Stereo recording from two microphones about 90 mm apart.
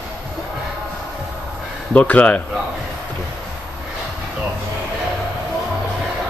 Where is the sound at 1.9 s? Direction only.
15° left (ahead or behind).